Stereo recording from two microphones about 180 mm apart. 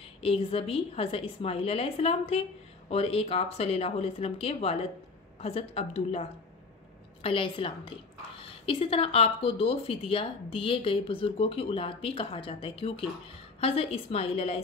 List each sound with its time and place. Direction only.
0.2 s a woman's voice: 30° left (ahead or behind)